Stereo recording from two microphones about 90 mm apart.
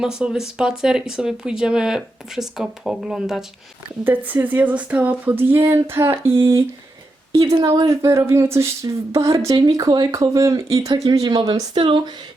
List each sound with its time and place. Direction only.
0.0 s speech: 5° right (ahead or behind)
4.0 s speech: 20° right (ahead or behind)
7.9 s speech: 35° right (ahead or behind); by 12.1 s 60° right (ahead or behind)